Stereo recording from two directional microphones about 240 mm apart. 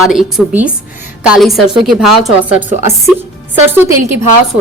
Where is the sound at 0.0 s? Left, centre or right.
Centre.